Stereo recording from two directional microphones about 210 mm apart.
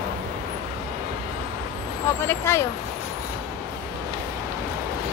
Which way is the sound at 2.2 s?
10° left (ahead or behind).